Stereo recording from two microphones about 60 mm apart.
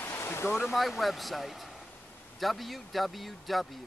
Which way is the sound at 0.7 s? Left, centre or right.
Centre.